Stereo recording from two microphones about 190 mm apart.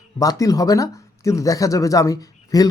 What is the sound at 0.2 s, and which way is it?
Speech, 20° left (ahead or behind).